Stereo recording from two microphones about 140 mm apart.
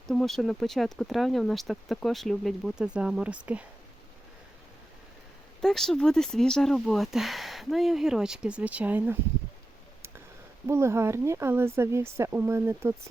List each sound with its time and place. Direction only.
0.1 s speech: 5° left (ahead or behind)
5.5 s speech: 5° left (ahead or behind); by 9.1 s 15° right (ahead or behind)
10.7 s speech: 20° right (ahead or behind)